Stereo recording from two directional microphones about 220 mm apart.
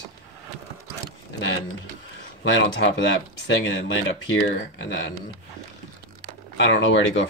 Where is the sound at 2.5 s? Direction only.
55° left (ahead or behind).